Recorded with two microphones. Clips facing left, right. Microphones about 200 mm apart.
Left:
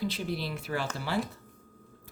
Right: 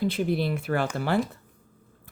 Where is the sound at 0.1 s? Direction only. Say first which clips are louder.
Right 8 dB; 55° right (ahead or behind).